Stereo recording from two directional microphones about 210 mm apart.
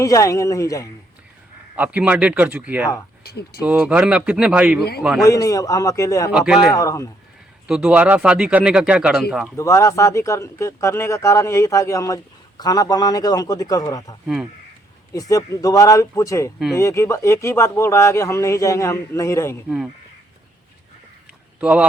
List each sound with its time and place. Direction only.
0.0 s speech: 15° left (ahead or behind)
1.7 s speech: 5° right (ahead or behind)
3.2 s speech: 50° left (ahead or behind)
3.6 s speech: 5° right (ahead or behind)
5.2 s speech: 15° left (ahead or behind)
6.3 s speech: centre (ahead or behind)
6.7 s speech: 15° left (ahead or behind)
7.7 s speech: 5° right (ahead or behind)
9.6 s speech: 15° left (ahead or behind)
19.6 s speech: centre (ahead or behind)
21.6 s speech: 5° right (ahead or behind)